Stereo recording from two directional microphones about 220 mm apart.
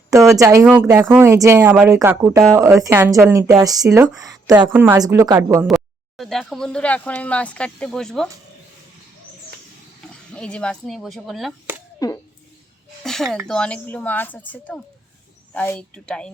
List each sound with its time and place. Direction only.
0.1 s speech: 15° right (ahead or behind)
5.6 s speech: centre (ahead or behind)
10.3 s speech: 5° left (ahead or behind)
11.9 s a sound: 15° left (ahead or behind)
13.0 s a sound: centre (ahead or behind)
13.5 s speech: 5° left (ahead or behind)